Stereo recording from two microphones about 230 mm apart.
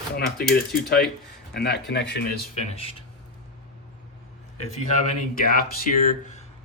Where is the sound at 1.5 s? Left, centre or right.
Left.